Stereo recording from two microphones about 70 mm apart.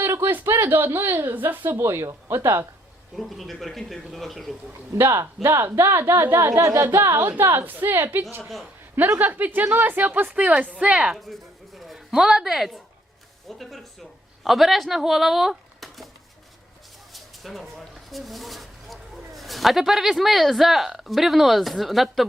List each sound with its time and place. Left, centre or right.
0.2 s speech: right
3.2 s speech: centre
4.9 s speech: right
6.6 s a woman's voice: right; by 11.2 s centre
11.3 s a sound: centre
13.5 s speech: centre
17.1 s speech: centre